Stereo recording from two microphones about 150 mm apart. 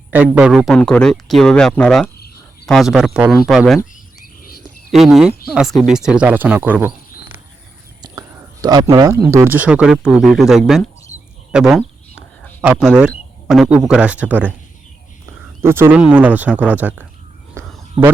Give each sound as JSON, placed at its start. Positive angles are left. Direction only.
{"t": 0.3, "sound": "speech", "side_deg": -5}
{"t": 4.9, "sound": "speech", "side_deg": 0}
{"t": 8.0, "sound": "whispering", "side_deg": -25}
{"t": 8.6, "sound": "speech", "side_deg": -25}
{"t": 11.5, "sound": "a sound", "side_deg": -5}
{"t": 12.6, "sound": "speech", "side_deg": -5}
{"t": 15.6, "sound": "speech", "side_deg": -15}